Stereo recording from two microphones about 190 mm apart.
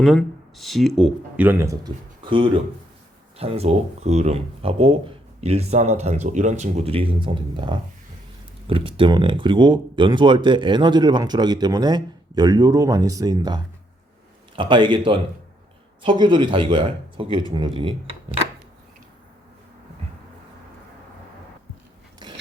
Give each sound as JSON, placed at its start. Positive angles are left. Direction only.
{"t": 0.0, "sound": "speech", "side_deg": 0}